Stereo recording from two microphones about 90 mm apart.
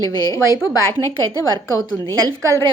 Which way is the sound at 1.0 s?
40° left (ahead or behind).